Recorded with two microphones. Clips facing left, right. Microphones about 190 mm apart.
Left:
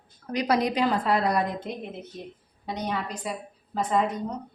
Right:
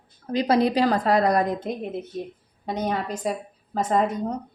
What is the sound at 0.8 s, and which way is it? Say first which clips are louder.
A woman's voice: right 4 dB; 45° right (ahead or behind).